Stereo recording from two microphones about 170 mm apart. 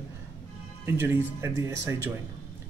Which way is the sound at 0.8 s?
10° right (ahead or behind).